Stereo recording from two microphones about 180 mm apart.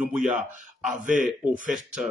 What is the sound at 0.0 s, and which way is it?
Speech, 5° right (ahead or behind).